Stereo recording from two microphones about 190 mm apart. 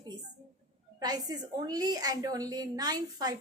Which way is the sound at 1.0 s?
20° right (ahead or behind).